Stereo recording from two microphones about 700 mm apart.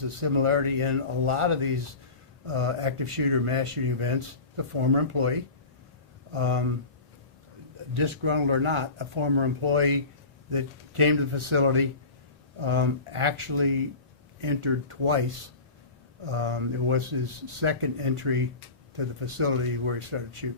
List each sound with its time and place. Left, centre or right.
0.2 s speech: right
6.3 s speech: right
7.9 s speech: right
16.2 s speech: right